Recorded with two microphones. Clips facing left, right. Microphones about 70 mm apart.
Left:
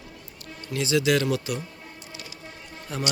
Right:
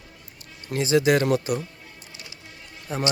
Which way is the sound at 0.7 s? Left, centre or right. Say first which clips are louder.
Right 3 dB; right.